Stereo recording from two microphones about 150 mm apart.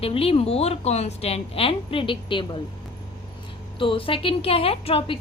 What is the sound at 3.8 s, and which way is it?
A woman's voice, 35° left (ahead or behind).